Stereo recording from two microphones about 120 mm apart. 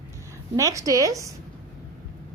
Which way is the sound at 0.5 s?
25° right (ahead or behind).